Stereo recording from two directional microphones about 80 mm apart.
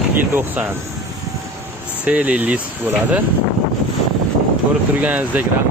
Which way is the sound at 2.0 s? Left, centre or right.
Centre.